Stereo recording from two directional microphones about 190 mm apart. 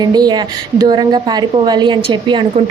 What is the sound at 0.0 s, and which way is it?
A woman's voice, 20° right (ahead or behind).